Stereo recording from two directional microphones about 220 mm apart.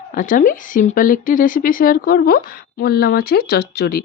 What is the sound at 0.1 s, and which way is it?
A woman's voice, 40° left (ahead or behind).